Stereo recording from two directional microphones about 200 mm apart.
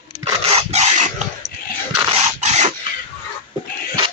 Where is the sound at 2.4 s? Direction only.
35° right (ahead or behind).